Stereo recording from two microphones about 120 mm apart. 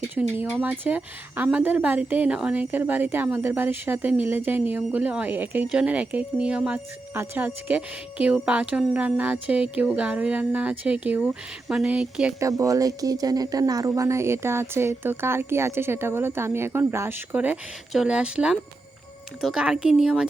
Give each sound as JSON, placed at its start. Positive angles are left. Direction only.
{"t": 0.1, "sound": "speech", "side_deg": -15}
{"t": 12.4, "sound": "a woman's voice", "side_deg": -30}